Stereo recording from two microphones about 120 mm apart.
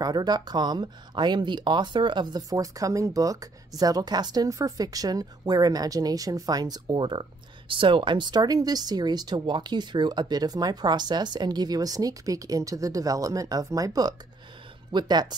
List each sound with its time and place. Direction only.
0.0 s speech: 35° right (ahead or behind)